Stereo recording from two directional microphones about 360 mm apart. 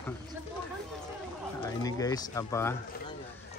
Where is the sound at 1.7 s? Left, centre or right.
Centre.